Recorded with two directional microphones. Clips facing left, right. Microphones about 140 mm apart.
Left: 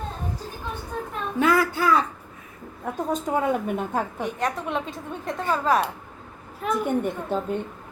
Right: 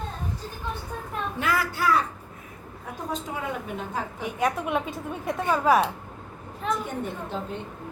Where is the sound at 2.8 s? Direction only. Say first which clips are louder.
Left 6 dB; 50° left (ahead or behind).